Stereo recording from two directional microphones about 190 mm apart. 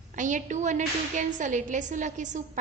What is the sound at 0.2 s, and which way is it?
A woman's voice, 40° right (ahead or behind).